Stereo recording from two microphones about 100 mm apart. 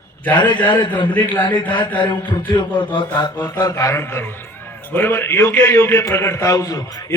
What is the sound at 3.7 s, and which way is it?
A man's voice, 25° left (ahead or behind).